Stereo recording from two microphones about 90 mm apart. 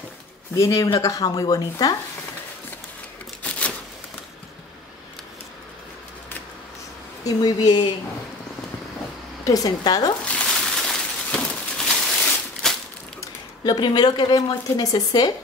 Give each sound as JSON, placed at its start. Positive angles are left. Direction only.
{"t": 0.6, "sound": "a woman's voice", "side_deg": 35}
{"t": 3.4, "sound": "a sound", "side_deg": 15}
{"t": 7.2, "sound": "speech", "side_deg": 45}
{"t": 9.4, "sound": "a woman's voice", "side_deg": 40}
{"t": 10.2, "sound": "a sound", "side_deg": 10}
{"t": 13.7, "sound": "speech", "side_deg": 55}